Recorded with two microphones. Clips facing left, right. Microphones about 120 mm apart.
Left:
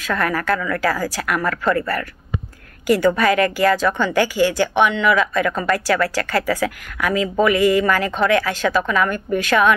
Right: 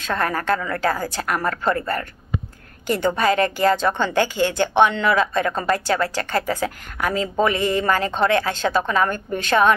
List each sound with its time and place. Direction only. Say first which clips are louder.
0.0 s a woman's voice: left 2 dB; 30° right (ahead or behind)